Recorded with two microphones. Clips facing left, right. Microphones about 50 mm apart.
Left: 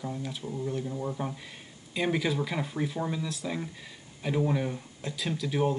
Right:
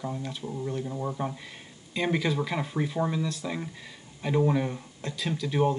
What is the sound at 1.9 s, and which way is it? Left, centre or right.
Speech, centre.